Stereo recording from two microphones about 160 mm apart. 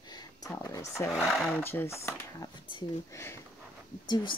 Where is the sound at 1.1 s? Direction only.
Centre (ahead or behind).